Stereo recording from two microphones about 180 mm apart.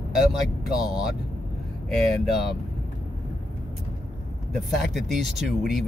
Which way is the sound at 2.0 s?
Centre (ahead or behind).